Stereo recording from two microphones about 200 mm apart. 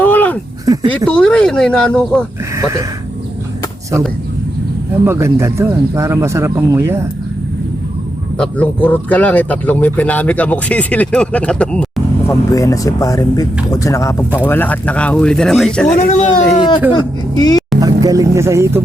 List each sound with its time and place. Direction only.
0.0 s a sound: 10° left (ahead or behind)
0.6 s speech: 20° right (ahead or behind)
0.9 s speech: 5° left (ahead or behind)
2.6 s speech: 15° right (ahead or behind)
5.0 s speech: 15° right (ahead or behind)
8.4 s speech: 10° left (ahead or behind)
12.3 s speech: 15° left (ahead or behind)
16.0 s speech: 35° left (ahead or behind)
16.6 s speech: 25° left (ahead or behind)
17.7 s speech: 20° right (ahead or behind)